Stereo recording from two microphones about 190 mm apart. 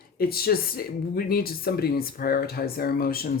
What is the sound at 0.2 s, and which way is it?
Speech, 55° left (ahead or behind).